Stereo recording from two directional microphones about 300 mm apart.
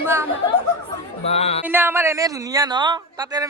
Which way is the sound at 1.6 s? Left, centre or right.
Centre.